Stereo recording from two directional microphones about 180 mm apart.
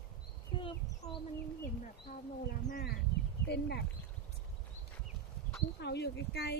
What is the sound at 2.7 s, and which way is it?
A woman's voice, 60° left (ahead or behind).